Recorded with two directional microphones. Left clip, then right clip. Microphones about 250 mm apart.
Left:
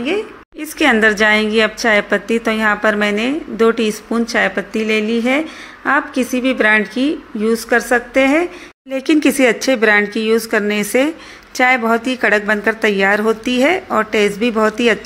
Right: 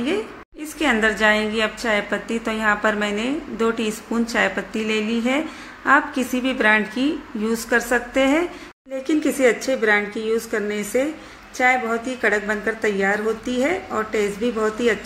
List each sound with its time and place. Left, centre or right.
0.7 s a woman's voice: left
8.9 s a woman's voice: left